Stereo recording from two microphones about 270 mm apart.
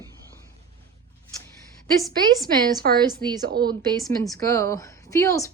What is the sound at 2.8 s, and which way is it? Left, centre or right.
Speech, right.